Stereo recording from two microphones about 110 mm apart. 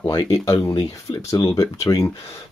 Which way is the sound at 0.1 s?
35° left (ahead or behind).